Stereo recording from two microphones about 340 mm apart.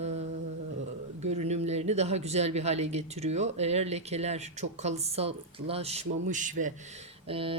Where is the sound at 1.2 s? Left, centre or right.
Centre.